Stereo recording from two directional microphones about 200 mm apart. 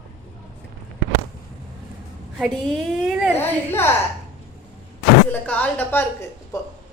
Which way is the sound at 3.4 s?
10° left (ahead or behind).